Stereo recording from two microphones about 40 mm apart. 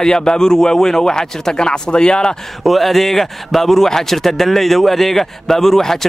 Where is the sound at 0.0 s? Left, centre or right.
Centre.